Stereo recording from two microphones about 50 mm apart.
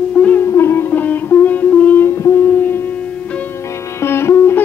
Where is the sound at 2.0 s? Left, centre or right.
Left.